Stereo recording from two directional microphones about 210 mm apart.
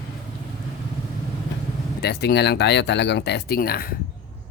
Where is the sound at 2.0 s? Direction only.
50° left (ahead or behind).